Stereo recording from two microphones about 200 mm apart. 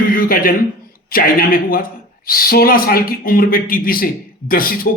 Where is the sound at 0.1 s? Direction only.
45° left (ahead or behind).